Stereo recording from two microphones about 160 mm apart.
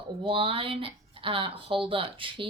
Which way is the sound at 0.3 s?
35° right (ahead or behind).